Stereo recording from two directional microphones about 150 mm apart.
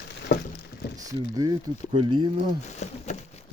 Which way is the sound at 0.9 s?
25° right (ahead or behind).